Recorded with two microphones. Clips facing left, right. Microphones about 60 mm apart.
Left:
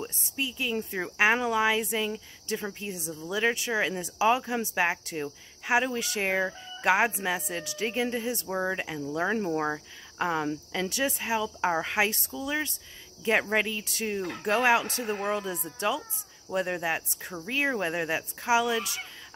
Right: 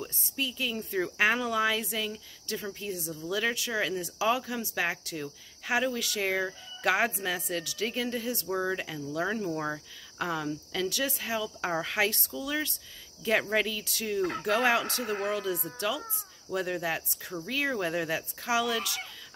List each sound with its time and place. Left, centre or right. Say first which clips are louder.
0.0 s speech: left 1 dB; left